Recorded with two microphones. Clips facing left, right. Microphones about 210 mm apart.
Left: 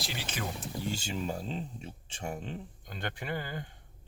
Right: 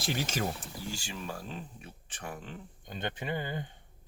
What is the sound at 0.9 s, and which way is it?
Speech, 20° left (ahead or behind).